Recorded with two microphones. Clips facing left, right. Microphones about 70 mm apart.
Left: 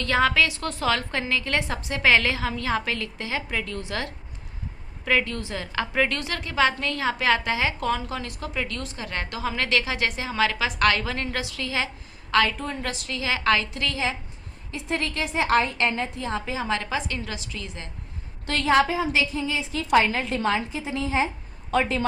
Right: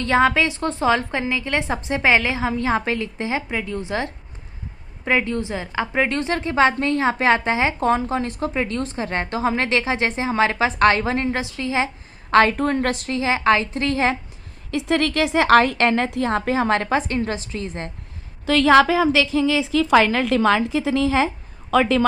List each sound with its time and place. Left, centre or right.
0.0 s a woman's voice: right
12.3 s a woman's voice: right
13.1 s a woman's voice: right
14.7 s a woman's voice: right
18.7 s a woman's voice: right